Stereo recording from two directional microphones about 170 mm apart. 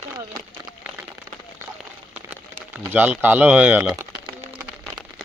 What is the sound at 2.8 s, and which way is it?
Speech, 10° right (ahead or behind).